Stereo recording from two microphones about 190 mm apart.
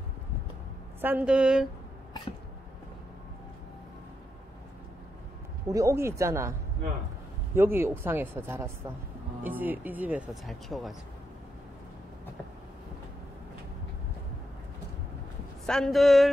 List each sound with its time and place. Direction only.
1.0 s a woman's voice: 5° right (ahead or behind)
5.7 s speech: 15° right (ahead or behind)
7.5 s speech: 10° right (ahead or behind)
15.6 s a woman's voice: centre (ahead or behind)